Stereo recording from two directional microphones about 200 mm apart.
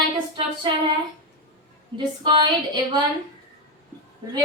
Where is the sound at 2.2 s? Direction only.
20° right (ahead or behind).